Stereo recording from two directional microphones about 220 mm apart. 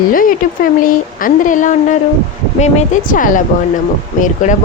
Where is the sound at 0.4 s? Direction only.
40° left (ahead or behind).